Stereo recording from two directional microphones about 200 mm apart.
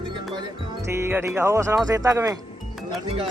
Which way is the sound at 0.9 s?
10° right (ahead or behind).